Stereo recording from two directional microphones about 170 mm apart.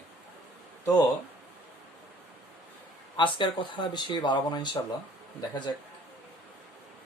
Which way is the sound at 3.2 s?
30° left (ahead or behind).